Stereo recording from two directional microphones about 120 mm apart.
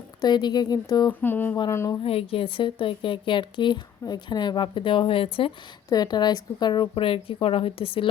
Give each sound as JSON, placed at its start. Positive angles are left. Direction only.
{"t": 0.2, "sound": "speech", "side_deg": 35}
{"t": 1.2, "sound": "a sound", "side_deg": 15}
{"t": 1.7, "sound": "speech", "side_deg": 25}
{"t": 2.0, "sound": "a woman's voice", "side_deg": 50}
{"t": 5.9, "sound": "a woman's voice", "side_deg": 35}